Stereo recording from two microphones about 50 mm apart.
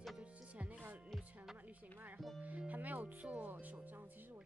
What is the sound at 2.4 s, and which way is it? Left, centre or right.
Speech, right.